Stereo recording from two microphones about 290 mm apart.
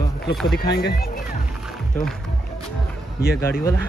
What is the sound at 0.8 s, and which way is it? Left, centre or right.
Speech, left.